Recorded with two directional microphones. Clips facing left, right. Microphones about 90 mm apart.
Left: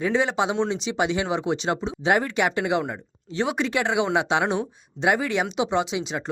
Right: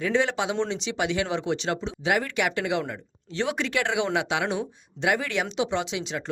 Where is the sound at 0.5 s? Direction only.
5° left (ahead or behind).